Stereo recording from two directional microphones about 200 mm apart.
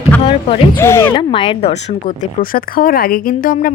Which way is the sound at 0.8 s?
10° left (ahead or behind).